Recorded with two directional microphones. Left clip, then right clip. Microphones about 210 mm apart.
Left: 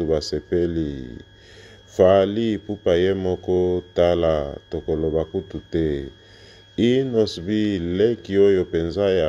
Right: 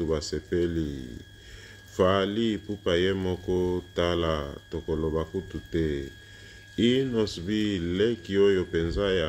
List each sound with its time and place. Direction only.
0.0 s speech: 15° left (ahead or behind)
2.0 s speech: 15° left (ahead or behind)